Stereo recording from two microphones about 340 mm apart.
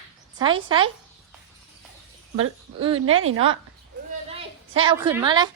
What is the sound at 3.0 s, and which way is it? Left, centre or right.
Speech, right.